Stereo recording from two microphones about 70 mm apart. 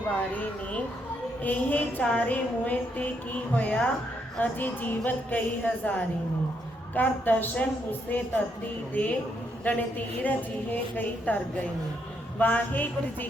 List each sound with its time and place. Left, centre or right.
0.2 s a woman's voice: centre
12.4 s a woman's voice: left